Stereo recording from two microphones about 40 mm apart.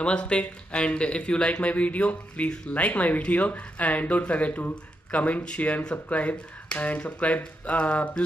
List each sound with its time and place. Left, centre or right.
0.0 s speech: left